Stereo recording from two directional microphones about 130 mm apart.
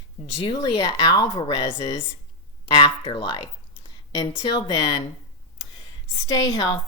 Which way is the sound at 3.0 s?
35° left (ahead or behind).